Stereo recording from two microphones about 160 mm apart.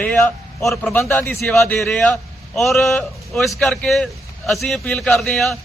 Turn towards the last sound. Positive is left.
turn(degrees=0)  # may be behind; listen again after turning